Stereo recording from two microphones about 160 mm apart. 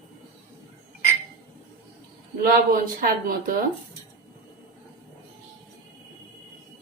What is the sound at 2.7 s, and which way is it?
Speech, 60° right (ahead or behind).